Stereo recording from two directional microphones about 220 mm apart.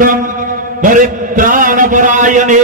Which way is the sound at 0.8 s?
35° right (ahead or behind).